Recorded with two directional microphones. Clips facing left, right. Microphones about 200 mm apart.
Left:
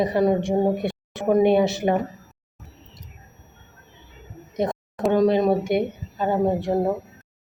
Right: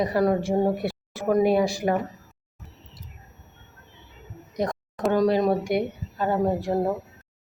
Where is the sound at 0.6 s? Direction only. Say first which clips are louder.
Left 2 dB; 20° left (ahead or behind).